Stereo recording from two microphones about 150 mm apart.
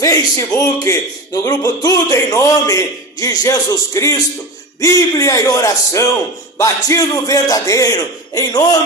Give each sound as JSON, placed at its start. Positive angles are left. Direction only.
{"t": 0.0, "sound": "a man's voice", "side_deg": 20}